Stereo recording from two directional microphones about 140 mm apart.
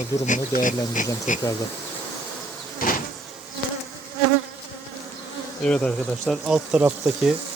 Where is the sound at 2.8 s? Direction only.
90° left.